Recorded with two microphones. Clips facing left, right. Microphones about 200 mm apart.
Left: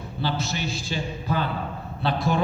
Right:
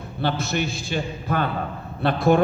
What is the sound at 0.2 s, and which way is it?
A man's voice, 55° right (ahead or behind).